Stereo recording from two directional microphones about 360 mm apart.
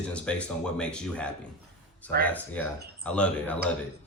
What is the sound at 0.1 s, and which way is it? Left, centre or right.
Speech, centre.